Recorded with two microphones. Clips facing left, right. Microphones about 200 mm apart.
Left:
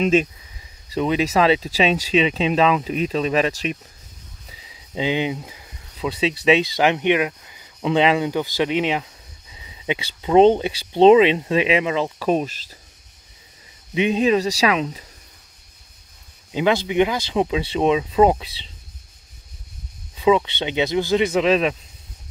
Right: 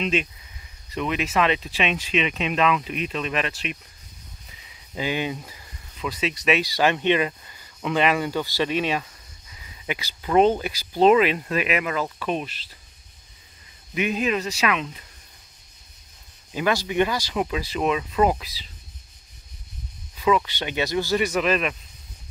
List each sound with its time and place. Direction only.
0.0 s speech: 45° left (ahead or behind)
0.9 s speech: 30° left (ahead or behind)
4.9 s speech: 20° left (ahead or behind)
5.9 s speech: 30° left (ahead or behind); by 7.6 s 10° left (ahead or behind)
7.8 s speech: 25° left (ahead or behind)
12.3 s speech: 40° left (ahead or behind)
13.9 s speech: 25° left (ahead or behind)
16.5 s speech: 20° left (ahead or behind)
20.2 s speech: 25° left (ahead or behind)